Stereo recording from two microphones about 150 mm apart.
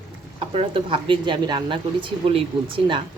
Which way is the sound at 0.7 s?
35° right (ahead or behind).